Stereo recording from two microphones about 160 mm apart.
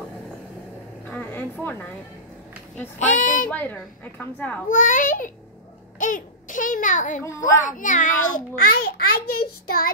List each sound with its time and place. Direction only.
1.1 s a sound: 10° left (ahead or behind)
3.0 s a child's voice: 55° left (ahead or behind)
3.4 s a woman's voice: 10° left (ahead or behind)
4.6 s a child's voice: 55° left (ahead or behind)
7.2 s a child's voice: 20° left (ahead or behind)
7.6 s a child's voice: 55° left (ahead or behind)
8.7 s a child's voice: 70° left (ahead or behind)